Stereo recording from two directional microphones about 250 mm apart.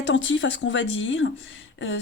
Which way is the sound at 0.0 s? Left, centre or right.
Left.